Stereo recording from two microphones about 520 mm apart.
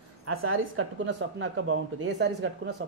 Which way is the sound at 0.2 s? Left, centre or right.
Right.